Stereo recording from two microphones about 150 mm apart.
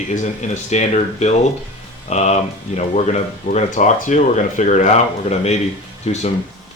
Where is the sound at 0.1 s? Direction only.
50° left (ahead or behind).